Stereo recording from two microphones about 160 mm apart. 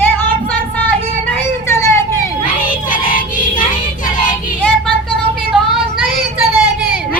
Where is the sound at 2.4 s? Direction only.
55° left (ahead or behind).